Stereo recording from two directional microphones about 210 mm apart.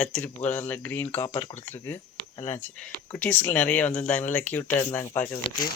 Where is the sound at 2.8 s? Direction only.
5° left (ahead or behind).